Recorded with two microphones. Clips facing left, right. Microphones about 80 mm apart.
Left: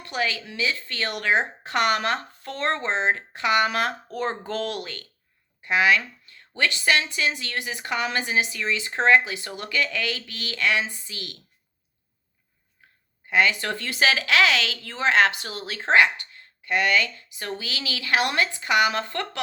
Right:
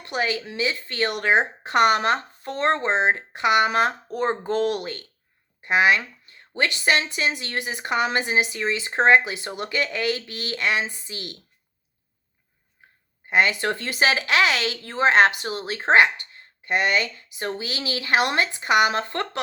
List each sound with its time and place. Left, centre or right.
0.0 s speech: right
12.8 s a sound: right
13.2 s speech: right